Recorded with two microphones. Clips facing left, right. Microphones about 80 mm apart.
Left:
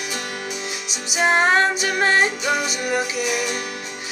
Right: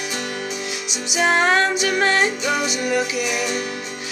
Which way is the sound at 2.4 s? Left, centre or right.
Centre.